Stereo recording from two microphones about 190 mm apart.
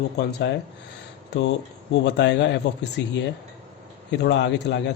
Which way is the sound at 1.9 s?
65° left (ahead or behind).